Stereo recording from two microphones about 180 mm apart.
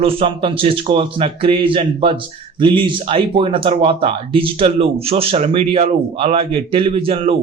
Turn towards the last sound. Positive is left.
turn(degrees=-30)  # may be behind; listen again after turning